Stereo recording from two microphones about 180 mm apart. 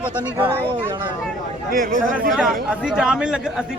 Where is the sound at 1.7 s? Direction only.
50° right (ahead or behind).